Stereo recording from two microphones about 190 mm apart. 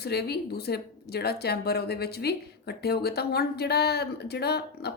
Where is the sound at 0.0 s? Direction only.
60° left (ahead or behind).